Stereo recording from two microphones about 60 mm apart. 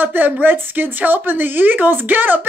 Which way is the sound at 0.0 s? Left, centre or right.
Right.